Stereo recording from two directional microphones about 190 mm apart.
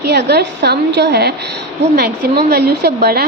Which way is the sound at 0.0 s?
60° right (ahead or behind).